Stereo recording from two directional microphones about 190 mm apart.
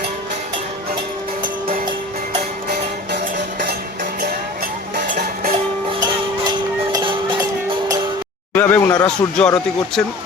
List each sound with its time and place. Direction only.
4.9 s a sound: 50° right (ahead or behind)
6.9 s music: 25° right (ahead or behind)
8.5 s speech: 10° left (ahead or behind)